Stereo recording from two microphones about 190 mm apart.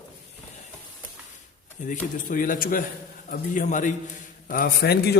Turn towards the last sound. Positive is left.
turn(degrees=55)  # may be behind; listen again after turning